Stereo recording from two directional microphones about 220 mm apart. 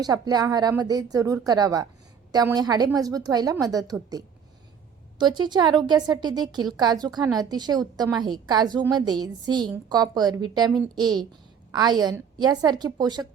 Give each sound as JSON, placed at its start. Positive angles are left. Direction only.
{"t": 0.0, "sound": "a woman's voice", "side_deg": -20}
{"t": 5.1, "sound": "a woman's voice", "side_deg": -20}